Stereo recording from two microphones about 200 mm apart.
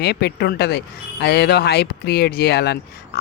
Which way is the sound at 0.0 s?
55° left (ahead or behind).